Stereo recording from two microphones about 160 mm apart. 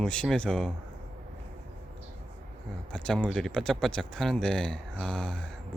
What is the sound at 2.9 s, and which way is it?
Speech, 5° left (ahead or behind).